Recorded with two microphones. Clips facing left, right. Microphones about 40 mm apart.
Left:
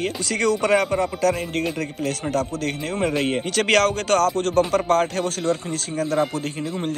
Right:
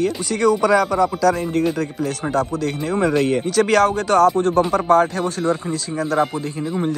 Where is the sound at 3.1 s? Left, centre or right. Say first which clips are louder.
Right 5 dB; left.